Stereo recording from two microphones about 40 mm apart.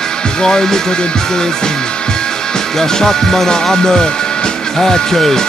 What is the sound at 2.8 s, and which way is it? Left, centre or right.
Music, centre.